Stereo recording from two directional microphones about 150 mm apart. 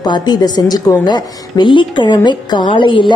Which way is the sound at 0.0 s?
30° left (ahead or behind).